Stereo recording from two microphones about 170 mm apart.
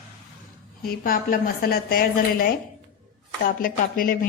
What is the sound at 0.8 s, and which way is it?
Speech, 60° left (ahead or behind).